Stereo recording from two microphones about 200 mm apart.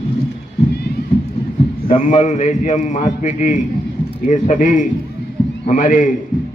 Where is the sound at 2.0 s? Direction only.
35° left (ahead or behind).